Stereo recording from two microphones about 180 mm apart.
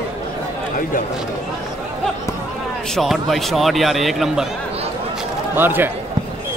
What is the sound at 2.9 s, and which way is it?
A man's voice, centre (ahead or behind).